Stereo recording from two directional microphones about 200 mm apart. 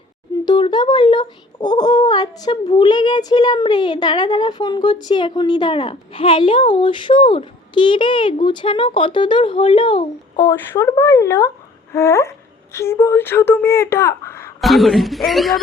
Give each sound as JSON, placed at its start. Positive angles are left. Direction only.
{"t": 0.4, "sound": "speech", "side_deg": 20}
{"t": 10.5, "sound": "speech", "side_deg": 10}
{"t": 14.6, "sound": "speech", "side_deg": 0}